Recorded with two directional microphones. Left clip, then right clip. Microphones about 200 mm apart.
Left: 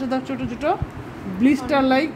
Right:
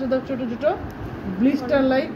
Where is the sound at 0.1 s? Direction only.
45° left (ahead or behind).